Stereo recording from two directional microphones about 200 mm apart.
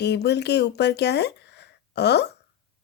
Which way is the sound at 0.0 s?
55° left (ahead or behind).